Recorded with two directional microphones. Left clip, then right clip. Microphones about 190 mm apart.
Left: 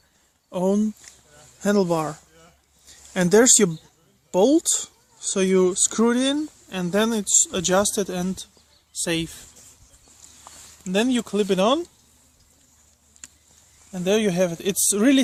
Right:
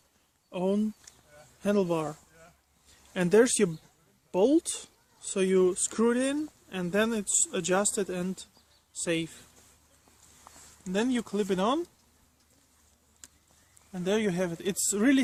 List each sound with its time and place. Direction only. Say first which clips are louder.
0.5 s speech: left 7 dB; 35° left (ahead or behind); by 9.3 s 50° left (ahead or behind)
10.9 s speech: left 7 dB; 40° left (ahead or behind)
13.9 s speech: left 7 dB; 40° left (ahead or behind)